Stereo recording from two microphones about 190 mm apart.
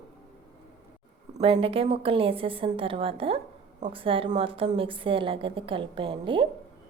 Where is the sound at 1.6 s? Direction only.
30° right (ahead or behind).